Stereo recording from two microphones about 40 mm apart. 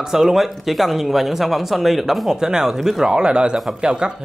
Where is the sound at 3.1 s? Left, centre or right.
Right.